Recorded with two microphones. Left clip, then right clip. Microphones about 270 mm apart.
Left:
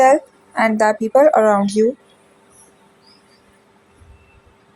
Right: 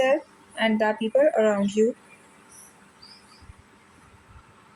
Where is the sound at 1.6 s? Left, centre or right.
Centre.